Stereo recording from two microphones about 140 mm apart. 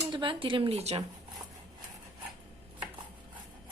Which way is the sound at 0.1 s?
35° right (ahead or behind).